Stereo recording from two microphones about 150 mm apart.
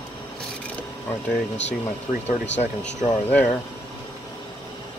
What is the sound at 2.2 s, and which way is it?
Speech, 45° left (ahead or behind).